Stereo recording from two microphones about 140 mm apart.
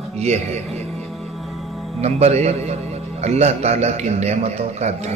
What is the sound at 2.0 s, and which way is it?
A man's voice, 50° right (ahead or behind).